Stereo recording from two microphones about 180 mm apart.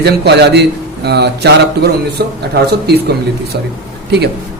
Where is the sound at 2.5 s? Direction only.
65° right (ahead or behind).